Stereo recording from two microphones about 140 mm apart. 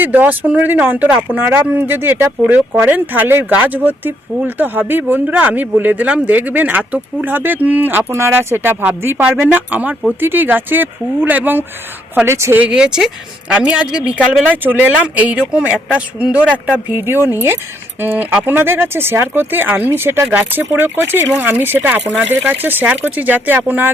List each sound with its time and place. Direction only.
0.0 s speech: 10° right (ahead or behind)